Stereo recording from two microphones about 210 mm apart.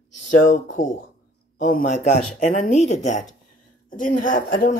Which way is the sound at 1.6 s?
40° left (ahead or behind).